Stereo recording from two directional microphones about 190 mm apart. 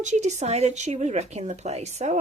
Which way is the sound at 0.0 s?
40° right (ahead or behind).